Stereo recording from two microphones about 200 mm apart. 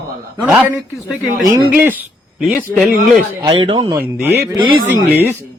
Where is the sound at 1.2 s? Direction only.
5° right (ahead or behind).